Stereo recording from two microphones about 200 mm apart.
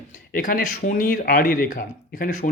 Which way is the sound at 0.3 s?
45° left (ahead or behind).